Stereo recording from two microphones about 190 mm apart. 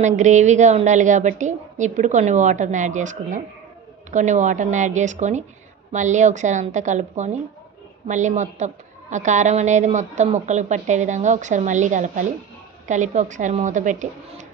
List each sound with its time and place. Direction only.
0.0 s a woman's voice: 40° right (ahead or behind)